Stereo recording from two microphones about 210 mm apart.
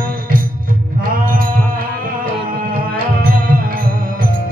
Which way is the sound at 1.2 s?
40° right (ahead or behind).